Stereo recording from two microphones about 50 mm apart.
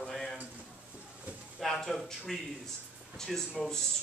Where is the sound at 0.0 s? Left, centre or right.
Centre.